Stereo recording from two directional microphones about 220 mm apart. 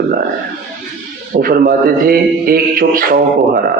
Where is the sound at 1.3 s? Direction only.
40° right (ahead or behind).